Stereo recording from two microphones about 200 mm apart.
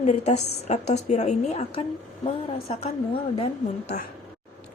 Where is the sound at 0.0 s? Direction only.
35° left (ahead or behind).